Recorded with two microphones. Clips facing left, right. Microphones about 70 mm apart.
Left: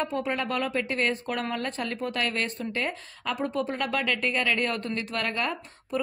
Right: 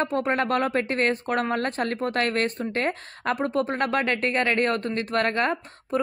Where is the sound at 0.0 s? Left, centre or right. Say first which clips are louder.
Right 5 dB; right.